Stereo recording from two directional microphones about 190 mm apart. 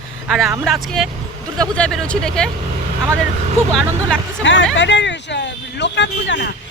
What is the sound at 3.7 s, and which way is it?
Speech, centre (ahead or behind).